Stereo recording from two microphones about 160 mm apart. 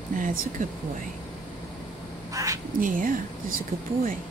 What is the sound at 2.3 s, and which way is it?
Quack, 20° right (ahead or behind).